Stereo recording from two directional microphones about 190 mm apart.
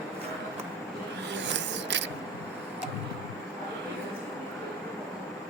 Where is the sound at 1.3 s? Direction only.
65° right (ahead or behind).